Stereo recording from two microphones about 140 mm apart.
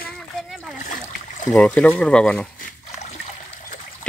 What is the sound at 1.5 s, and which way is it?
Speech, 10° left (ahead or behind).